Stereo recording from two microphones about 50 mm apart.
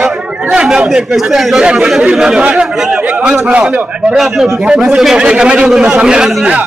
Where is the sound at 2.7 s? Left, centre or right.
Centre.